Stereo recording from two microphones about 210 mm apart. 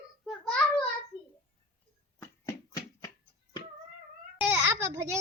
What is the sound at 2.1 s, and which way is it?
Music, 10° left (ahead or behind).